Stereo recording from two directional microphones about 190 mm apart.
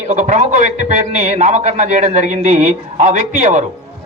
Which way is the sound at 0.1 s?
40° right (ahead or behind).